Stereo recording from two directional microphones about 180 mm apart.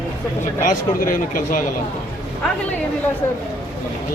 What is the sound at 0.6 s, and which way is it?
Speech, 45° left (ahead or behind).